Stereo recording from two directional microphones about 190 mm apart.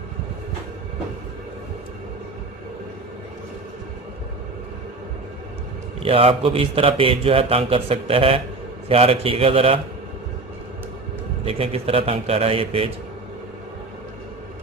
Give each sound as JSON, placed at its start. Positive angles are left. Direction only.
{"t": 6.0, "sound": "a man's voice", "side_deg": -30}
{"t": 11.4, "sound": "a man's voice", "side_deg": -30}